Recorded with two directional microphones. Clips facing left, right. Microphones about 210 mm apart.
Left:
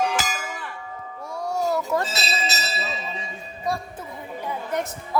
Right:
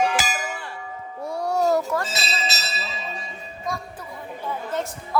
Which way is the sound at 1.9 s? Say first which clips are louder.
Left 2 dB; 10° left (ahead or behind).